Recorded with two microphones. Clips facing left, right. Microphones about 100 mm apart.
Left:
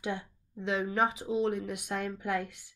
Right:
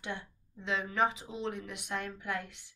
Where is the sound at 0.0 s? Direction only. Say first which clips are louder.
Left 5 dB; 15° left (ahead or behind).